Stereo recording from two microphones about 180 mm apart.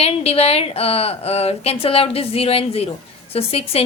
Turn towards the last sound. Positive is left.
turn(degrees=35)  # may be behind; listen again after turning